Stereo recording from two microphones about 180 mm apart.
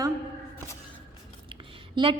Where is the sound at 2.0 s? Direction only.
25° right (ahead or behind).